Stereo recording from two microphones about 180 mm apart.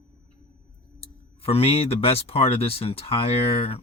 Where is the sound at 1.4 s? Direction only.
35° left (ahead or behind).